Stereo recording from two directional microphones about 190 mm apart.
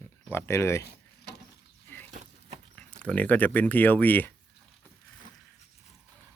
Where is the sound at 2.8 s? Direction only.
5° left (ahead or behind).